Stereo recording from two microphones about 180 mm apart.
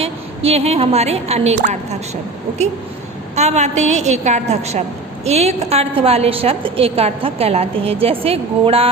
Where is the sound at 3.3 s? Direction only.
40° right (ahead or behind).